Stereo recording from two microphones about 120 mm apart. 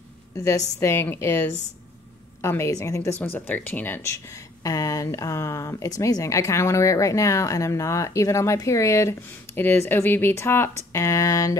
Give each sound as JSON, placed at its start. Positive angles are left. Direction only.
{"t": 0.4, "sound": "speech", "side_deg": 25}
{"t": 3.3, "sound": "speech", "side_deg": 15}
{"t": 4.6, "sound": "speech", "side_deg": 30}